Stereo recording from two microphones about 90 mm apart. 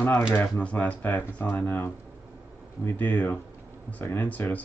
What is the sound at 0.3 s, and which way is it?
Speech, 20° left (ahead or behind).